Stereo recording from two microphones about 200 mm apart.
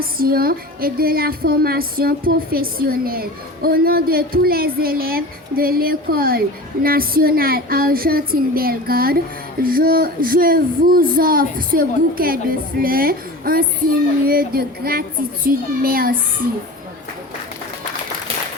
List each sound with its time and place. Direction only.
0.0 s speech: 45° right (ahead or behind)